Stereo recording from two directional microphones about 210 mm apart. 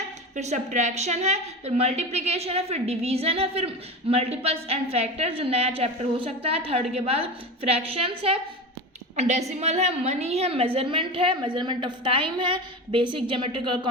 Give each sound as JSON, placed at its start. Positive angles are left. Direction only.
{"t": 0.3, "sound": "a woman's voice", "side_deg": -35}